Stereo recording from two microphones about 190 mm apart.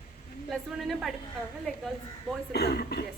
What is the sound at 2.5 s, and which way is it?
Speech, 60° left (ahead or behind).